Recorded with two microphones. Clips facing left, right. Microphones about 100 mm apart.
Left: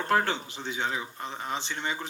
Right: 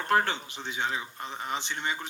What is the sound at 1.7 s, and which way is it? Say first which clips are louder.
Speech: even; 20° left (ahead or behind).